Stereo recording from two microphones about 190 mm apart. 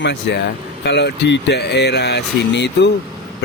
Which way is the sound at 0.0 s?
65° left (ahead or behind).